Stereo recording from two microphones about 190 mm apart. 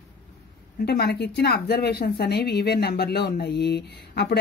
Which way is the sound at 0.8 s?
60° left (ahead or behind).